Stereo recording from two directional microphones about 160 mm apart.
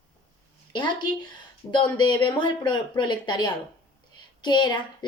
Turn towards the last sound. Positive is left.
turn(degrees=30)  # may be behind; listen again after turning